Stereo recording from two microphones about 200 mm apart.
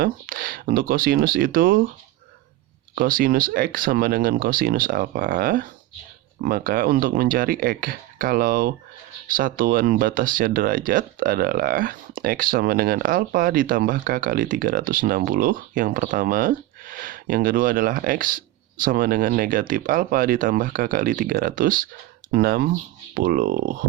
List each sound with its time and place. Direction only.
0.0 s speech: 45° right (ahead or behind)
2.9 s speech: 45° right (ahead or behind)